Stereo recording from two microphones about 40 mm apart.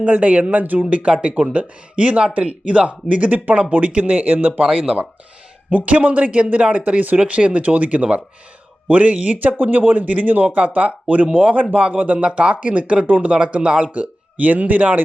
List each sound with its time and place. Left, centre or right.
0.0 s speech: right
0.9 s speech: right
4.6 s speech: centre
5.7 s speech: right
6.7 s speech: right
12.2 s speech: right
13.3 s speech: right
13.9 s speech: right